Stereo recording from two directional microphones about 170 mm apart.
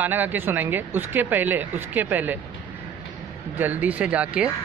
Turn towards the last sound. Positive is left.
turn(degrees=-5)  # may be behind; listen again after turning